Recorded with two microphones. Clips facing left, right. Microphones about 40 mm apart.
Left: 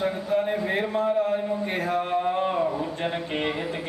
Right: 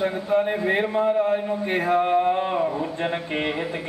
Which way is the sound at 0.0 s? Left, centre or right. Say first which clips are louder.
Right 3 dB; centre.